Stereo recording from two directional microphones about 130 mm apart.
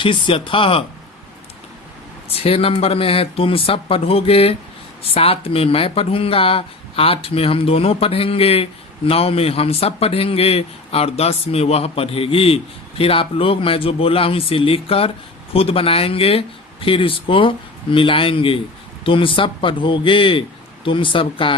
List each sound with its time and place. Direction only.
0.0 s a man's voice: 40° left (ahead or behind)
2.3 s a man's voice: 50° left (ahead or behind)